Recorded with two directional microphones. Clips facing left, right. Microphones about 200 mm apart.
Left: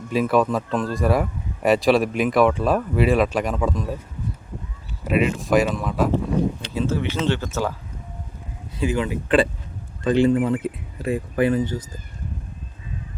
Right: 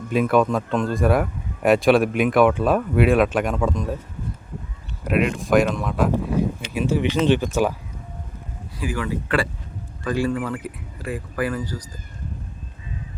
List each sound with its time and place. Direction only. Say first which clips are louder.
0.1 s speech: right 1 dB; centre (ahead or behind)
5.0 s speech: even; centre (ahead or behind)
6.7 s speech: right 2 dB; 15° right (ahead or behind)
8.8 s speech: left 3 dB; 20° left (ahead or behind)